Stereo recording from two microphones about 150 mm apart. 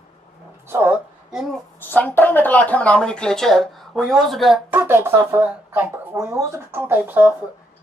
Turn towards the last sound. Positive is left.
turn(degrees=-15)  # may be behind; listen again after turning